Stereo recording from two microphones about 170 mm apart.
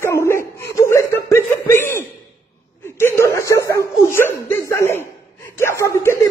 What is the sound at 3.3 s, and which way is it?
Chuckle, 15° left (ahead or behind).